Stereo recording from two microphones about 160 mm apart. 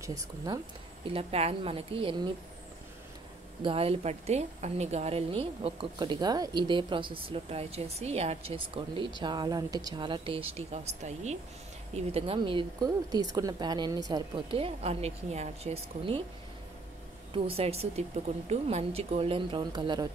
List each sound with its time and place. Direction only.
1.1 s a woman's voice: 40° right (ahead or behind)
3.6 s a woman's voice: 35° right (ahead or behind)
17.3 s a woman's voice: 35° right (ahead or behind)